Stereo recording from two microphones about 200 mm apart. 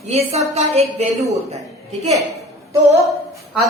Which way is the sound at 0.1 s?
30° right (ahead or behind).